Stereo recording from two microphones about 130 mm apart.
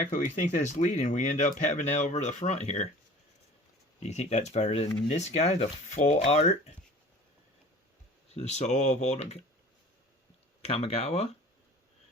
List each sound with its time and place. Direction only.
0.0 s speech: 80° left; by 2.9 s 60° left (ahead or behind)
4.0 s speech: 55° left (ahead or behind)
8.3 s speech: 60° left (ahead or behind)
10.6 s speech: 50° left (ahead or behind)